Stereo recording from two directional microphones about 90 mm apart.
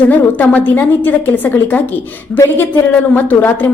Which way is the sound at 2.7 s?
20° left (ahead or behind).